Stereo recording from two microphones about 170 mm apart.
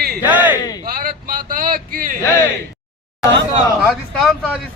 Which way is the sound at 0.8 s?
60° right (ahead or behind).